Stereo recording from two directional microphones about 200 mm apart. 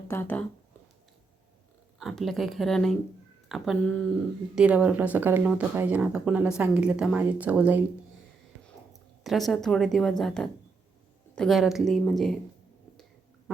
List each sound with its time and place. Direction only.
0.1 s speech: 10° left (ahead or behind)
2.0 s speech: centre (ahead or behind)
4.5 s speech: 5° right (ahead or behind)